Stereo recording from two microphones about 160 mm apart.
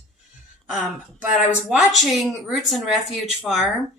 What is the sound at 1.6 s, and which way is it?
Speech, centre (ahead or behind).